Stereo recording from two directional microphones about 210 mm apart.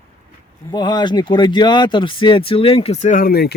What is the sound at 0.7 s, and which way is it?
Speech, 20° left (ahead or behind).